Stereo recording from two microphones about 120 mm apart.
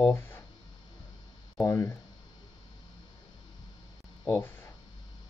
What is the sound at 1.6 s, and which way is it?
Speech, 20° left (ahead or behind).